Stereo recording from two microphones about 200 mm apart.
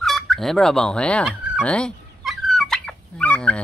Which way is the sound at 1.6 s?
5° left (ahead or behind).